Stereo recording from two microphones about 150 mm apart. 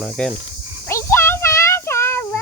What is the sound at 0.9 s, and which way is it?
Child singing, 15° left (ahead or behind).